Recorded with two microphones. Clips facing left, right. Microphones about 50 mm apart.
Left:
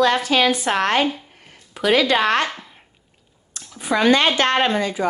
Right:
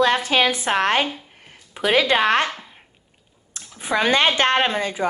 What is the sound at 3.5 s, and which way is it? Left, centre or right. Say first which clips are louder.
Speech: left 1 dB; right.